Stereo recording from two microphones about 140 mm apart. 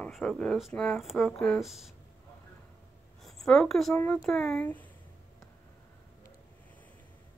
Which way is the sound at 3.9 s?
10° left (ahead or behind).